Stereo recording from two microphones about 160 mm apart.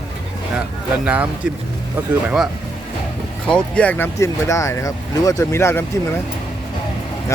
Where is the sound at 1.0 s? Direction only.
10° right (ahead or behind).